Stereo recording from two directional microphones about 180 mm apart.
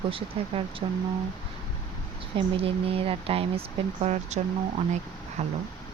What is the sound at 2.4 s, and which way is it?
Speech, 30° right (ahead or behind).